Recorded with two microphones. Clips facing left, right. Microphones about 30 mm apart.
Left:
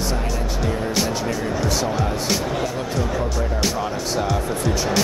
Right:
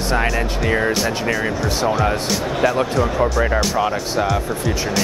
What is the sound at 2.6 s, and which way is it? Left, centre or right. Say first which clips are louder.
Speech: right 7 dB; right.